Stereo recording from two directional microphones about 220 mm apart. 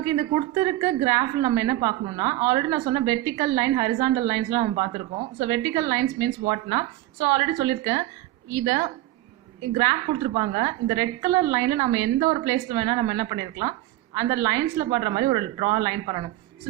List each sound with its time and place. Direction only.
0.0 s a woman's voice: 15° right (ahead or behind)